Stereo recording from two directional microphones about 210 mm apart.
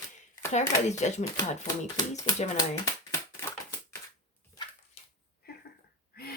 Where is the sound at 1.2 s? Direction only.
15° left (ahead or behind).